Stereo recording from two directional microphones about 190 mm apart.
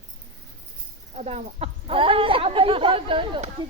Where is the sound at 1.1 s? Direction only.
35° right (ahead or behind).